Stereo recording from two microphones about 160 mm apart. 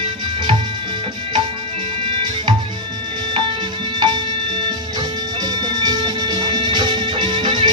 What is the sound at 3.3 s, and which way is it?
Music, 30° right (ahead or behind).